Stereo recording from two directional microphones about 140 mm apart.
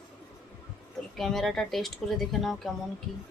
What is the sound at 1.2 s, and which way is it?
Speech, centre (ahead or behind).